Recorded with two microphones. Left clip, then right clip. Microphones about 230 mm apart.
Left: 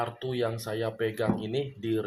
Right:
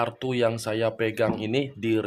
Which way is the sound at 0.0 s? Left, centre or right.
Right.